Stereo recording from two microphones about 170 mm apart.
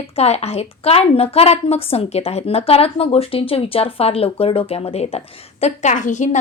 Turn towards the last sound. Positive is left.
turn(degrees=45)  # may be behind; listen again after turning